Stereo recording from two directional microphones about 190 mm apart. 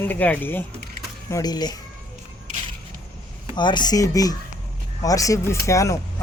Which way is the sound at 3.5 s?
25° left (ahead or behind).